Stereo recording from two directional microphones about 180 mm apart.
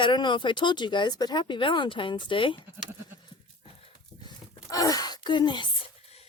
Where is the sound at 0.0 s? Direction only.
25° left (ahead or behind).